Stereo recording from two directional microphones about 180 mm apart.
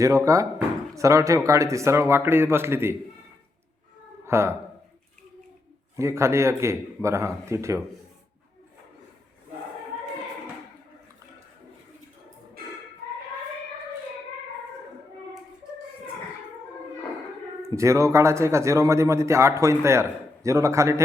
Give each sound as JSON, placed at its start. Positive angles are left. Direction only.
{"t": 0.0, "sound": "speech", "side_deg": -20}
{"t": 4.3, "sound": "speech", "side_deg": -15}
{"t": 6.0, "sound": "speech", "side_deg": -15}
{"t": 17.7, "sound": "speech", "side_deg": -15}